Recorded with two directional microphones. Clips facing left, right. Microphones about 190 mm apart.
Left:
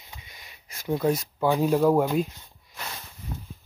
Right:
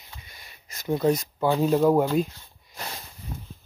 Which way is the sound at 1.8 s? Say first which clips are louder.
Right 1 dB; 10° right (ahead or behind).